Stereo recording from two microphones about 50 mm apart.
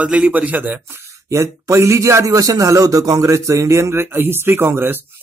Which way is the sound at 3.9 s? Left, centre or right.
Right.